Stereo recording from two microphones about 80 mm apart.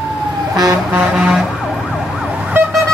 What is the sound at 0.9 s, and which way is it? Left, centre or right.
Vehicle, centre.